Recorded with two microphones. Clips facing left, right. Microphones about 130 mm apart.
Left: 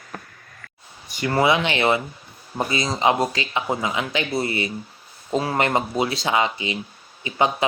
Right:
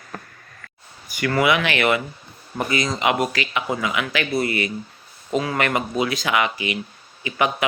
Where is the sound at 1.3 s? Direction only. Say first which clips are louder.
Even; 25° left (ahead or behind).